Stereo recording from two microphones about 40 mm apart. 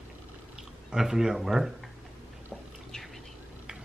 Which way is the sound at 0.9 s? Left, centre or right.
Centre.